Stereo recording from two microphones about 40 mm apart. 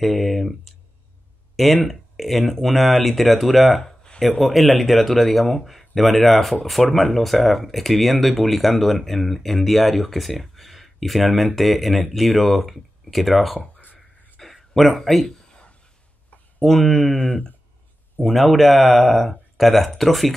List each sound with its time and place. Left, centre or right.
0.0 s speech: centre
14.4 s a sound: centre
16.6 s speech: centre
18.2 s speech: centre